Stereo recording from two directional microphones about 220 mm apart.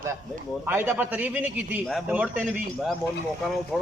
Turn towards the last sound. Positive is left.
turn(degrees=0)  # may be behind; listen again after turning